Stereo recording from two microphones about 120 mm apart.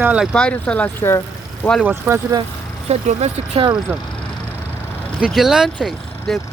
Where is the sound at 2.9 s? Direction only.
60° right (ahead or behind).